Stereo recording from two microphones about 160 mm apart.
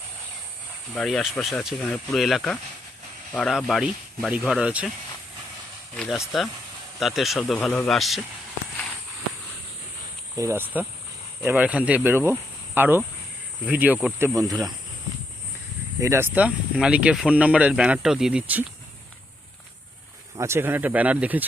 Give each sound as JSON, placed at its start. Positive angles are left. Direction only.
{"t": 0.9, "sound": "speech", "side_deg": 0}
{"t": 6.0, "sound": "speech", "side_deg": 0}
{"t": 10.3, "sound": "speech", "side_deg": -15}
{"t": 16.0, "sound": "speech", "side_deg": -15}
{"t": 20.3, "sound": "speech", "side_deg": -15}